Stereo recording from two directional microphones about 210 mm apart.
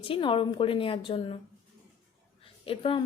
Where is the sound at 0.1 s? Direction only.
25° left (ahead or behind).